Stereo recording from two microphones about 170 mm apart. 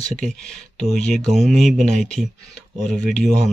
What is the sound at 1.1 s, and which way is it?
Speech, centre (ahead or behind).